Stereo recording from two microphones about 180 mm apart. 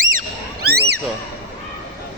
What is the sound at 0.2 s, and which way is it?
Music, 60° right (ahead or behind).